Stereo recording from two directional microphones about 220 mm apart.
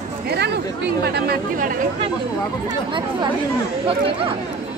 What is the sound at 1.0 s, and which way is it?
Speech, 45° right (ahead or behind).